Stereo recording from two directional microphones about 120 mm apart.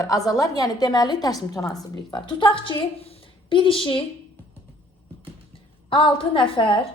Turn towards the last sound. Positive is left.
turn(degrees=50)  # may be behind; listen again after turning